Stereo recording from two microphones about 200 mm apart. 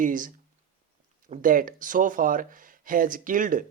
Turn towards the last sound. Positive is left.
turn(degrees=-40)  # may be behind; listen again after turning